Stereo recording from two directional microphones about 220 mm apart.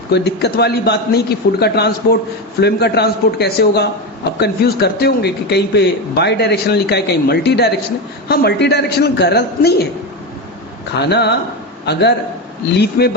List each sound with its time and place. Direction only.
0.1 s a man's voice: 50° left (ahead or behind)
11.1 s a man's voice: 50° left (ahead or behind)